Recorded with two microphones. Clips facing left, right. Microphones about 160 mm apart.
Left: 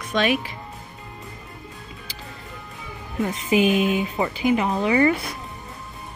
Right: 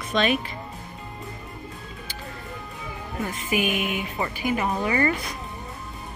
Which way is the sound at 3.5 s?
30° left (ahead or behind).